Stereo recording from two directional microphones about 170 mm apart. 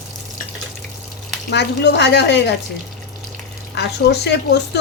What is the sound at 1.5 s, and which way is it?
A woman's voice, 85° left.